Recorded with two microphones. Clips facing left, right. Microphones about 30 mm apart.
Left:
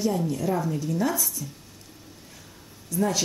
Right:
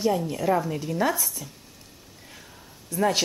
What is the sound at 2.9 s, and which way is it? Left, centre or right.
Speech, right.